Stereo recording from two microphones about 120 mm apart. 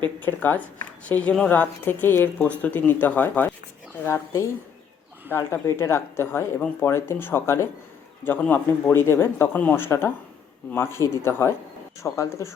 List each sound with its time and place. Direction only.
0.2 s speech: 15° left (ahead or behind)